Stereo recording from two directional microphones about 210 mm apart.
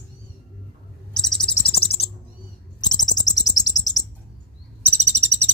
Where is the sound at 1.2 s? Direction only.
Centre (ahead or behind).